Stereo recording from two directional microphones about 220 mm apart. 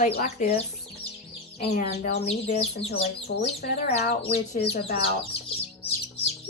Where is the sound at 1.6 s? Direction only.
40° left (ahead or behind).